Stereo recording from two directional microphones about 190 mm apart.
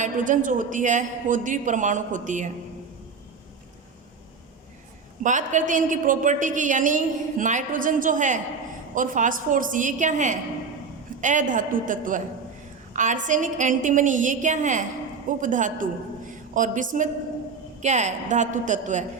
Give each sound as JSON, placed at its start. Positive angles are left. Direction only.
{"t": 0.0, "sound": "a woman's voice", "side_deg": -45}
{"t": 5.2, "sound": "a woman's voice", "side_deg": -40}